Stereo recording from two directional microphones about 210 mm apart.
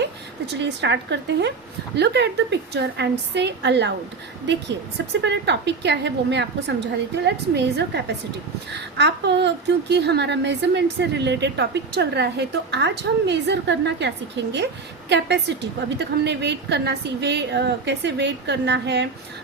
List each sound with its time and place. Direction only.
0.4 s a woman's voice: 55° right (ahead or behind)
5.2 s a woman's voice: 55° right (ahead or behind)
15.1 s a woman's voice: 55° right (ahead or behind)